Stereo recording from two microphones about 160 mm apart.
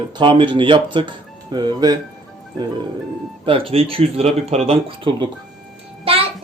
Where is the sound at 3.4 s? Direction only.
35° right (ahead or behind).